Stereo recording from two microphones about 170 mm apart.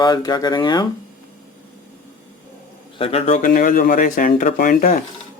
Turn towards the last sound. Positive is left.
turn(degrees=55)  # may be behind; listen again after turning